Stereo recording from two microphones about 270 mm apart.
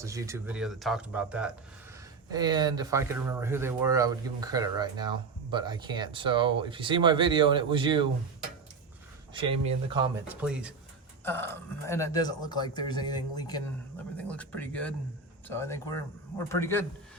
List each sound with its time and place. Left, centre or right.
0.0 s speech: centre
2.3 s speech: centre
9.3 s speech: centre
10.2 s speech: centre
11.3 s speech: centre